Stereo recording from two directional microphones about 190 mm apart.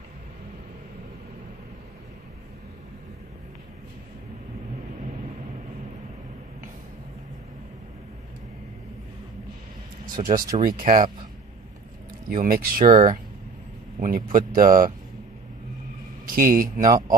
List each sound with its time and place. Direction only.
10.2 s speech: 40° right (ahead or behind)
12.3 s speech: 50° right (ahead or behind)
16.3 s a man's voice: 50° right (ahead or behind)